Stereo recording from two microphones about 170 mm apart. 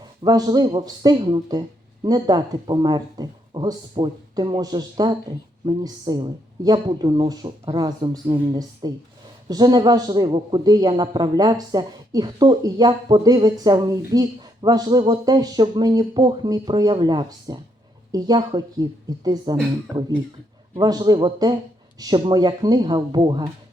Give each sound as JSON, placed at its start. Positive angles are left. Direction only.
{"t": 0.0, "sound": "a man's voice", "side_deg": -25}